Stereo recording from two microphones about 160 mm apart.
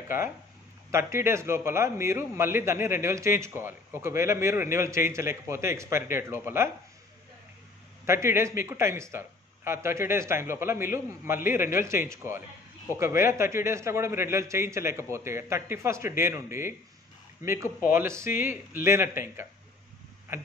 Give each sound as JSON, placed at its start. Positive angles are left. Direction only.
{"t": 0.9, "sound": "a man's voice", "side_deg": -15}
{"t": 8.0, "sound": "a man's voice", "side_deg": -15}
{"t": 17.9, "sound": "a man's voice", "side_deg": -15}